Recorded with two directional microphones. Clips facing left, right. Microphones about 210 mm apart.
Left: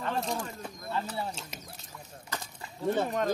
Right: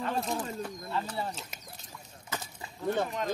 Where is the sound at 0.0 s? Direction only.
Centre (ahead or behind).